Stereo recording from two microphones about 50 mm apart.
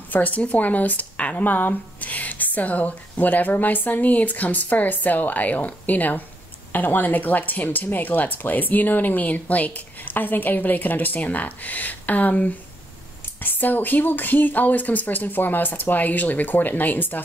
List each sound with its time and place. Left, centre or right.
0.1 s speech: left